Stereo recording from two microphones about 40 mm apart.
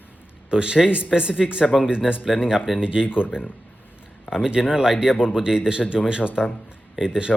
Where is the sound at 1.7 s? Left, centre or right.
Centre.